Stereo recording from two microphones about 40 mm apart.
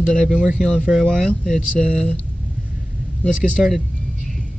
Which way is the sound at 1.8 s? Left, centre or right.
Left.